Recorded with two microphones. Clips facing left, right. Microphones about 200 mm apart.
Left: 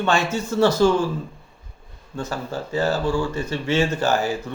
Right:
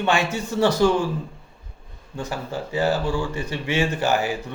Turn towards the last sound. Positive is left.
turn(degrees=-15)  # may be behind; listen again after turning